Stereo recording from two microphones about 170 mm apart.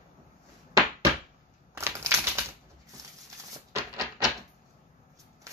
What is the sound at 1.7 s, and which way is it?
Crumpling, 15° right (ahead or behind).